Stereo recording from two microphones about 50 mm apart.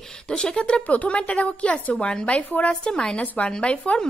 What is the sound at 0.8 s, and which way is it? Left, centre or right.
A woman's voice, left.